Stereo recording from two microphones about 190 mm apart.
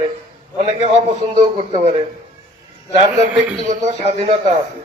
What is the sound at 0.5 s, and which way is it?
A man's voice, 35° right (ahead or behind).